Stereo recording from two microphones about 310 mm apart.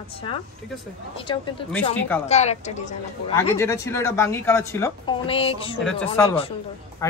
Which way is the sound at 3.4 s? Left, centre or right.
Centre.